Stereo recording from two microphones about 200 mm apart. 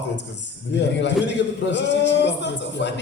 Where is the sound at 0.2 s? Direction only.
60° left (ahead or behind).